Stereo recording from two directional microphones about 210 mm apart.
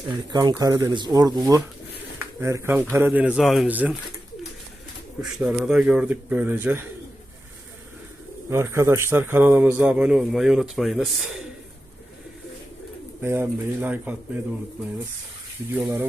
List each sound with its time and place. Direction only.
0.3 s a man's voice: 20° right (ahead or behind)
5.3 s a man's voice: 5° right (ahead or behind)
8.4 s a man's voice: 15° right (ahead or behind)
13.2 s a man's voice: 10° right (ahead or behind)